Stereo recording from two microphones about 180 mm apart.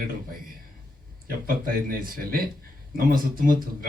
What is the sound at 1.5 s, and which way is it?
A man's voice, 55° right (ahead or behind).